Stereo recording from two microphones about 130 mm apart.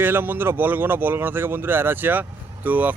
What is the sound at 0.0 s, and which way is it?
Speech, 15° right (ahead or behind).